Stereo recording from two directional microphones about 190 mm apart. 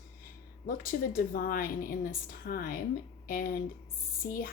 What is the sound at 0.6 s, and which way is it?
A woman's voice, 50° left (ahead or behind).